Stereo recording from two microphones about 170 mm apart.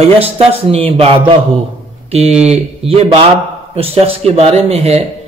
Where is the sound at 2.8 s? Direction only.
35° right (ahead or behind).